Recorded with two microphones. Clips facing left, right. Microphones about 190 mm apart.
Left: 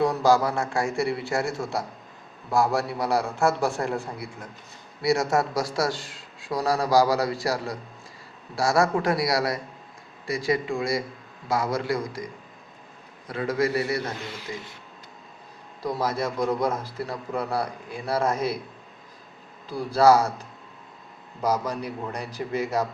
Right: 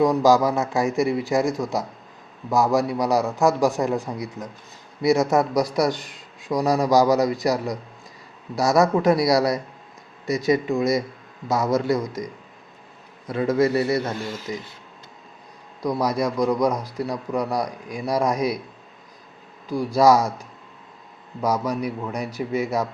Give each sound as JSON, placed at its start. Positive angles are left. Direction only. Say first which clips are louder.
{"t": 0.0, "sound": "a man's voice", "louder": "right 4 dB", "side_deg": -20}
{"t": 13.2, "sound": "a man's voice", "louder": "right 5 dB", "side_deg": -25}
{"t": 14.0, "sound": "a man's voice", "louder": "right 5 dB", "side_deg": -40}
{"t": 16.0, "sound": "a man's voice", "louder": "right 4 dB", "side_deg": -15}
{"t": 19.7, "sound": "a man's voice", "louder": "right 2 dB", "side_deg": -15}
{"t": 21.6, "sound": "a man's voice", "louder": "right 5 dB", "side_deg": -10}